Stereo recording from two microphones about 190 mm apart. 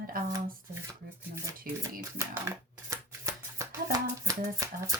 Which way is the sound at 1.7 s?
50° right (ahead or behind).